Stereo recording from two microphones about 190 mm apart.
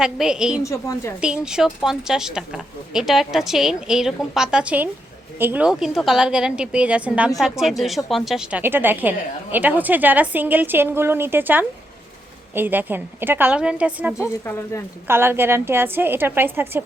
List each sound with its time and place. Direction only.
0.0 s speech: 5° right (ahead or behind)
0.6 s speech: 15° left (ahead or behind)
1.2 s a woman's voice: 5° right (ahead or behind)
14.2 s speech: 15° left (ahead or behind)
15.0 s a woman's voice: 10° right (ahead or behind)